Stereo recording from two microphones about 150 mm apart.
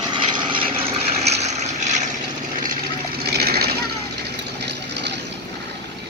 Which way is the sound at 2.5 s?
65° right (ahead or behind).